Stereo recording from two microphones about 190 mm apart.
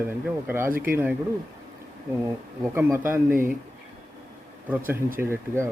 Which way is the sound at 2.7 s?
15° right (ahead or behind).